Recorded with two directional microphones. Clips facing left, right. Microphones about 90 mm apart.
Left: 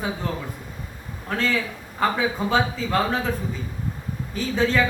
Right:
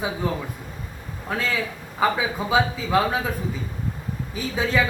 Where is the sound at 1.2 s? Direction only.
5° right (ahead or behind).